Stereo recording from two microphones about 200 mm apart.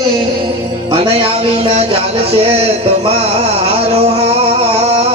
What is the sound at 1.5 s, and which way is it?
Music, 30° right (ahead or behind).